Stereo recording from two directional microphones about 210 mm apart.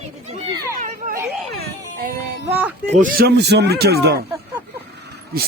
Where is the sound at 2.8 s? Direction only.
35° right (ahead or behind).